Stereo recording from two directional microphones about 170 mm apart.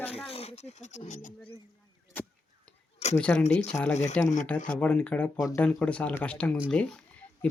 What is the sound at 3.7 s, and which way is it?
Speech, 15° left (ahead or behind).